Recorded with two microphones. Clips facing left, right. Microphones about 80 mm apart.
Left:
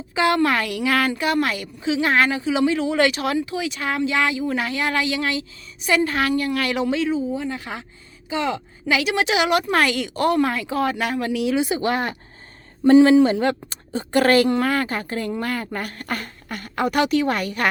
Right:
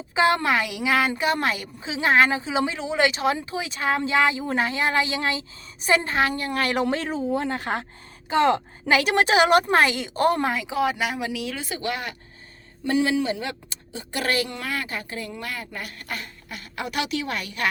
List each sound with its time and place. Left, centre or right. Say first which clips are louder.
0.1 s a woman's voice: left 2 dB; right
6.8 s a woman's voice: left 3 dB; right
9.7 s a woman's voice: even; right
10.5 s speech: left 1 dB; centre
11.4 s speech: left 11 dB; centre
11.7 s speech: left 7 dB; left